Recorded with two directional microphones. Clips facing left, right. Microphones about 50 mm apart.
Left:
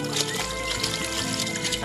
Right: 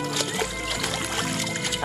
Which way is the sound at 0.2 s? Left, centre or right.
Centre.